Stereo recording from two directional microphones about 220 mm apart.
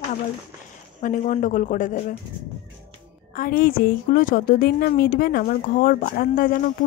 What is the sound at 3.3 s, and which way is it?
A woman's voice, 40° left (ahead or behind).